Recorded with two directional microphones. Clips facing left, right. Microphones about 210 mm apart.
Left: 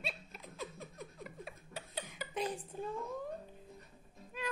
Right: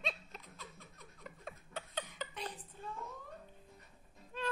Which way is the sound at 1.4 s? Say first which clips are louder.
Even; 10° left (ahead or behind).